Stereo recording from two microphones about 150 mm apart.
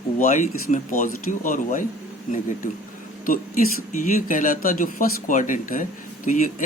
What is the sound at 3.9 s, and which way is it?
Speech, 60° left (ahead or behind).